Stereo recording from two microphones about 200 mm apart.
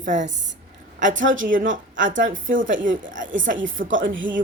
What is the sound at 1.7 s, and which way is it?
A woman's voice, 70° right (ahead or behind).